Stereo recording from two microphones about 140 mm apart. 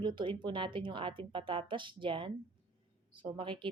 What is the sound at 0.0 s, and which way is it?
Speech, 35° right (ahead or behind).